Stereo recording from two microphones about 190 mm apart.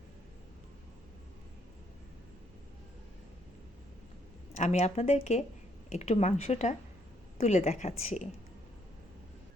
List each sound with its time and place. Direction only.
4.5 s speech: 35° left (ahead or behind)